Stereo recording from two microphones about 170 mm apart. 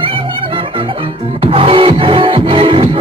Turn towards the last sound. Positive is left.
turn(degrees=-30)  # may be behind; listen again after turning